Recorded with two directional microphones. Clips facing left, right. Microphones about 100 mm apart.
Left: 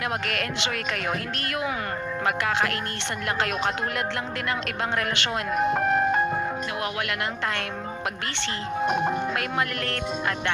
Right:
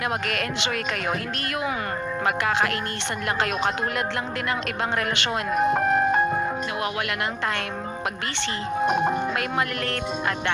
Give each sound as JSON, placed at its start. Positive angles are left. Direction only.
{"t": 0.0, "sound": "speech", "side_deg": -20}
{"t": 8.9, "sound": "speech", "side_deg": -25}